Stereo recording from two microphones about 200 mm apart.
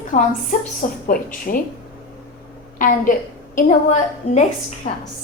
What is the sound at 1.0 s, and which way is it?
Speech, 45° left (ahead or behind).